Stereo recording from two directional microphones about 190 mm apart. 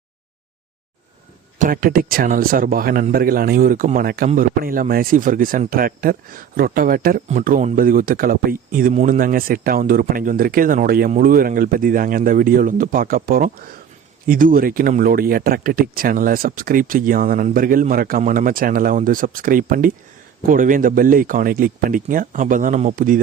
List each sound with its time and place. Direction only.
1.5 s speech: 45° right (ahead or behind)